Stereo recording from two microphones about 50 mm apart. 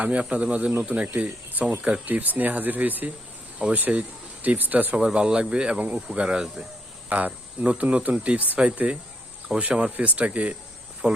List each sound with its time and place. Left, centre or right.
0.0 s speech: right
4.9 s speech: centre
7.1 s speech: right